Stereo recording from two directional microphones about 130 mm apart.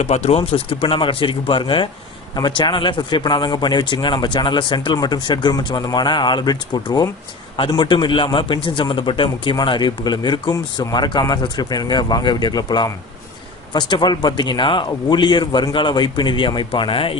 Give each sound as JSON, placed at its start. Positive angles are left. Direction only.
{"t": 0.0, "sound": "speech", "side_deg": 55}